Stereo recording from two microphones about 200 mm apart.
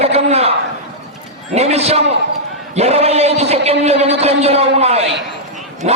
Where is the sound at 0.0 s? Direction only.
30° right (ahead or behind).